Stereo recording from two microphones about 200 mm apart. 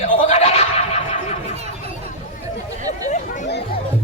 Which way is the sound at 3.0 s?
40° left (ahead or behind).